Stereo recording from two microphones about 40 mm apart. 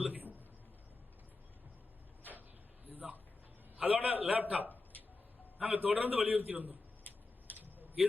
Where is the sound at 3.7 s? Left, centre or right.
Right.